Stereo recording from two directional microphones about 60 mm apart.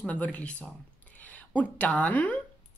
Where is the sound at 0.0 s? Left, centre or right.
Left.